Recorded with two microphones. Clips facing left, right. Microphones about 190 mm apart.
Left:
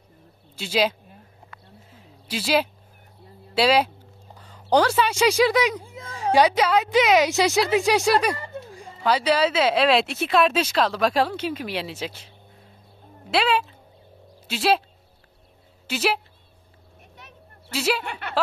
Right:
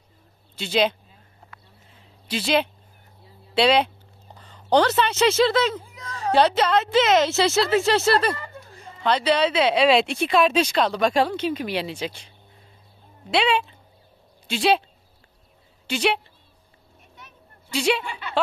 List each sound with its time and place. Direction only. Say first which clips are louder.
0.6 s speech: right 1 dB; 5° left (ahead or behind)
1.9 s a sound: right 2 dB; 5° left (ahead or behind)
3.5 s a woman's voice: right 1 dB; 5° left (ahead or behind)
13.3 s speech: even; centre (ahead or behind)
15.9 s speech: right 1 dB; 5° left (ahead or behind)
17.6 s speech: right 2 dB; 5° left (ahead or behind)
18.0 s a woman's voice: left 1 dB; 60° left (ahead or behind)